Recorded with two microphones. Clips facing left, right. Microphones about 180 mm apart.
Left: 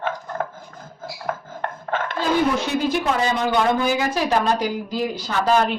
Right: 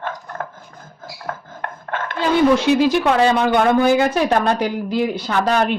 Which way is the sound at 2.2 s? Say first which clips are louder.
Right 6 dB; 80° right.